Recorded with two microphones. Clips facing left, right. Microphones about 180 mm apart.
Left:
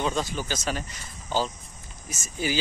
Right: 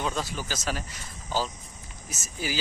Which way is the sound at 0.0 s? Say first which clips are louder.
Left 3 dB; 5° right (ahead or behind).